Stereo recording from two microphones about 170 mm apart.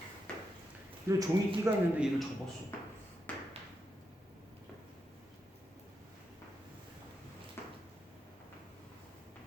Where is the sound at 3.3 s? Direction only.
10° left (ahead or behind).